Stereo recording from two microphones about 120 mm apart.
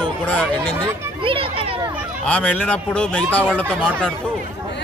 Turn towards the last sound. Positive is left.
turn(degrees=10)  # may be behind; listen again after turning